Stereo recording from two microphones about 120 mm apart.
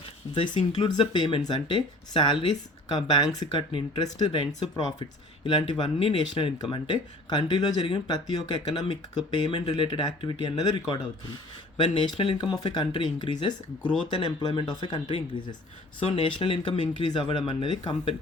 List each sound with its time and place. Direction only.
0.3 s speech: 40° left (ahead or behind)
16.1 s speech: 45° left (ahead or behind)